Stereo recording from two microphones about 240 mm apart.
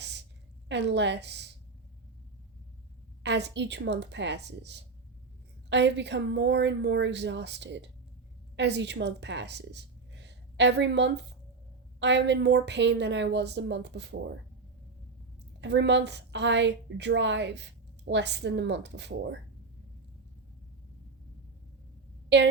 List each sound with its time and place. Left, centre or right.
0.7 s a woman's voice: right
3.2 s a woman's voice: right
15.6 s a woman's voice: right